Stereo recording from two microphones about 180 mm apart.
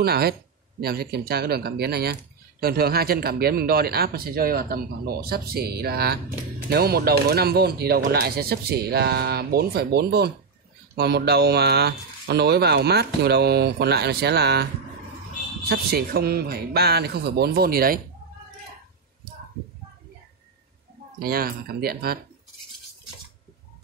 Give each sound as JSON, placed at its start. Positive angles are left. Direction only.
{"t": 0.0, "sound": "speech", "side_deg": -60}
{"t": 15.7, "sound": "speech", "side_deg": -60}
{"t": 21.2, "sound": "speech", "side_deg": -55}